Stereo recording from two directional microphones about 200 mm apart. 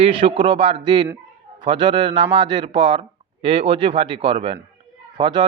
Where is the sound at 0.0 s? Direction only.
30° right (ahead or behind).